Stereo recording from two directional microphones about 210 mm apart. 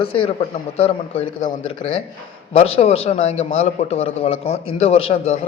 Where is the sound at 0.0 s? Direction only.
25° left (ahead or behind).